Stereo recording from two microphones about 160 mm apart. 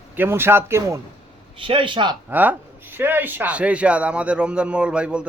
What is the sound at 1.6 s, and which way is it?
Speech, 30° right (ahead or behind).